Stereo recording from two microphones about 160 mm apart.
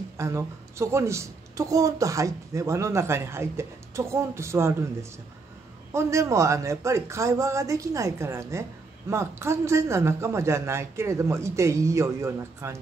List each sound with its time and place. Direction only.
0.2 s a woman's voice: 15° right (ahead or behind)
5.9 s a man's voice: 20° right (ahead or behind)